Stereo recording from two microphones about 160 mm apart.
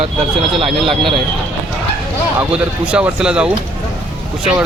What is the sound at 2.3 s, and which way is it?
Speech, 5° right (ahead or behind).